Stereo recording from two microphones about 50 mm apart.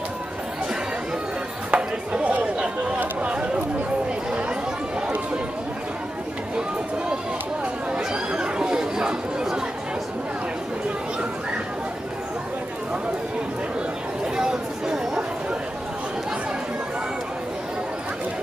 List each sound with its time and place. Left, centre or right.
1.7 s chatter: right
7.9 s chatter: centre
14.3 s chatter: centre